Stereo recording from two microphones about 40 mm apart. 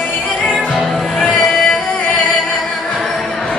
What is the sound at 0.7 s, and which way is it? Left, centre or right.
Music, centre.